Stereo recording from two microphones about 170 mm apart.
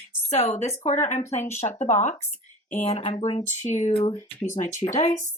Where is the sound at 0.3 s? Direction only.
40° left (ahead or behind).